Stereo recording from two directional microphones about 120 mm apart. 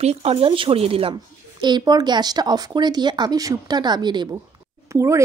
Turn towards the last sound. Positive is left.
turn(degrees=-25)  # may be behind; listen again after turning